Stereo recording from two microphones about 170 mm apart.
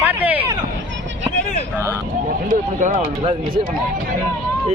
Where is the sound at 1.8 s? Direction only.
15° right (ahead or behind).